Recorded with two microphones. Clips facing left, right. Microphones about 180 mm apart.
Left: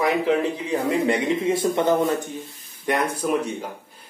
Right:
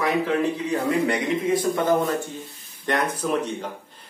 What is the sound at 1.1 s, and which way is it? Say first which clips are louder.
A man's voice: left 1 dB; 25° left (ahead or behind).